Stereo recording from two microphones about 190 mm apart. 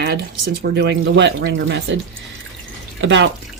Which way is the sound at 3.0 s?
75° right (ahead or behind).